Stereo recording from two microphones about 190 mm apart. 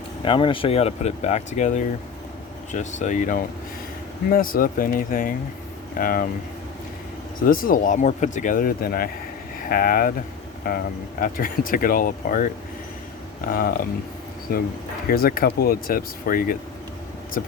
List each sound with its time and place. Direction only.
0.3 s speech: 25° left (ahead or behind); by 6.2 s 50° left (ahead or behind)
7.4 s speech: 50° left (ahead or behind)
13.5 s speech: 50° left (ahead or behind)